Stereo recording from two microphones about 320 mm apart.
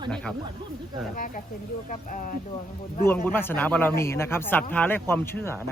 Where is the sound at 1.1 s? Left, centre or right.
Left.